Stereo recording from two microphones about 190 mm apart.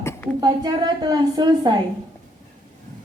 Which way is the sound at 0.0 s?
15° left (ahead or behind).